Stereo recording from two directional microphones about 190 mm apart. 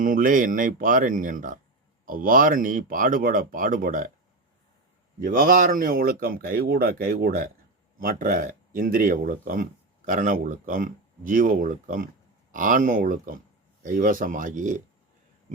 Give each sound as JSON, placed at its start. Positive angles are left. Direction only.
{"t": 0.0, "sound": "speech", "side_deg": -45}
{"t": 5.2, "sound": "speech", "side_deg": -50}